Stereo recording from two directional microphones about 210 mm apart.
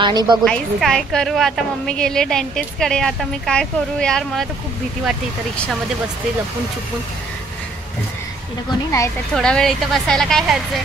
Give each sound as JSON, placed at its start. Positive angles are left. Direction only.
{"t": 0.0, "sound": "a woman's voice", "side_deg": -20}
{"t": 0.5, "sound": "a woman's voice", "side_deg": 0}
{"t": 8.6, "sound": "speech", "side_deg": 15}
{"t": 9.3, "sound": "a woman's voice", "side_deg": 5}